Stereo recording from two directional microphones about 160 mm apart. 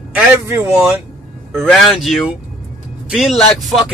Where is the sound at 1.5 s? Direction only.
Centre (ahead or behind).